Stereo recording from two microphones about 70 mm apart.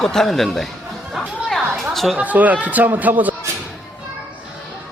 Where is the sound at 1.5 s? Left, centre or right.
Centre.